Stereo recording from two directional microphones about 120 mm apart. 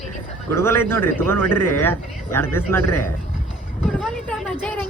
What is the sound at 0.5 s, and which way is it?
Speech, 20° left (ahead or behind).